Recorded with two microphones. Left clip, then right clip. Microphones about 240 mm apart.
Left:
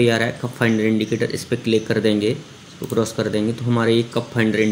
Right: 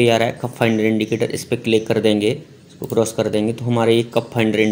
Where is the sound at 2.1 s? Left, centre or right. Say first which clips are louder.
Right 2 dB; centre.